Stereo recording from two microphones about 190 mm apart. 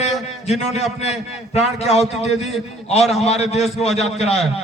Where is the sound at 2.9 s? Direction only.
35° left (ahead or behind).